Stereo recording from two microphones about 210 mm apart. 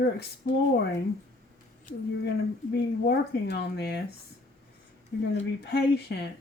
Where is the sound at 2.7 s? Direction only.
50° left (ahead or behind).